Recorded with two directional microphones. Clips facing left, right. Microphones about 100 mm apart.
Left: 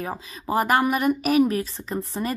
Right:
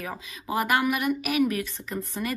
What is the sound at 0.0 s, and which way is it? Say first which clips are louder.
A woman's voice: left 5 dB; 35° left (ahead or behind).